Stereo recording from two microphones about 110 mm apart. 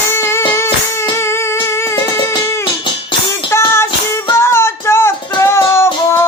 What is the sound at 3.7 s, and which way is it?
Music, 25° left (ahead or behind).